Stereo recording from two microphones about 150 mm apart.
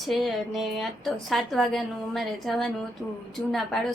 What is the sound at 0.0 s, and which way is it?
A woman's voice, centre (ahead or behind).